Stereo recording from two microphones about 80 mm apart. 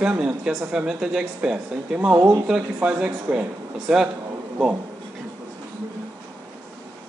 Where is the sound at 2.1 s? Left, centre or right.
Right.